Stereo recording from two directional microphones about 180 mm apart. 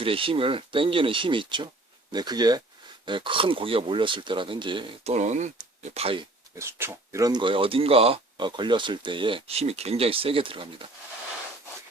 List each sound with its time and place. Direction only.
0.0 s speech: 30° right (ahead or behind)
6.6 s speech: 15° right (ahead or behind); by 10.8 s 30° right (ahead or behind)